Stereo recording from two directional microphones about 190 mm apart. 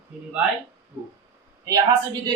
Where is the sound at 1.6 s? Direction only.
20° right (ahead or behind).